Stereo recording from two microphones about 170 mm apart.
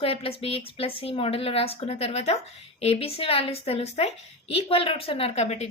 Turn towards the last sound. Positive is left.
turn(degrees=40)  # may be behind; listen again after turning